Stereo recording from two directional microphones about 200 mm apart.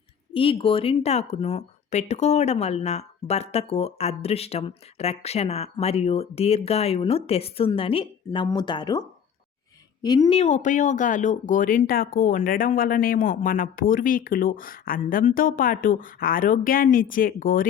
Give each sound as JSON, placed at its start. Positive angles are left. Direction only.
{"t": 0.3, "sound": "speech", "side_deg": 25}